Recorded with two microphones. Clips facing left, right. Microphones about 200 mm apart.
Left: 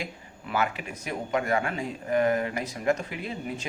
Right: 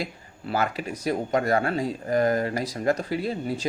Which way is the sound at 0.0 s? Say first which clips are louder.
Right 4 dB; 35° right (ahead or behind).